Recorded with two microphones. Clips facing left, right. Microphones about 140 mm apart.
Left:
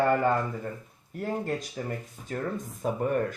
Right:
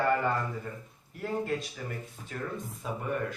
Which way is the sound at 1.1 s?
45° left (ahead or behind).